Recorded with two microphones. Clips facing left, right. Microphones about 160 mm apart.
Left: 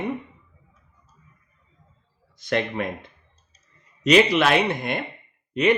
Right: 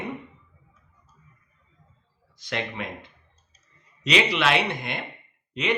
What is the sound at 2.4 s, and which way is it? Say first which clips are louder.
Speech: left 7 dB; 50° left (ahead or behind).